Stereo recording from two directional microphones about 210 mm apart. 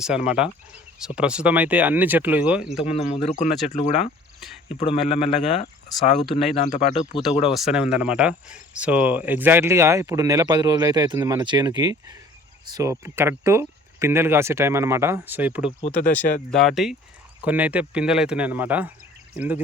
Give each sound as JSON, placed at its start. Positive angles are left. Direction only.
{"t": 0.0, "sound": "speech", "side_deg": -5}
{"t": 2.9, "sound": "a man's voice", "side_deg": 30}
{"t": 4.4, "sound": "cricket", "side_deg": 0}
{"t": 4.8, "sound": "a man's voice", "side_deg": 30}
{"t": 7.5, "sound": "speech", "side_deg": 0}